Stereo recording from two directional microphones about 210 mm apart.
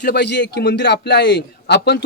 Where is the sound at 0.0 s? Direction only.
50° left (ahead or behind).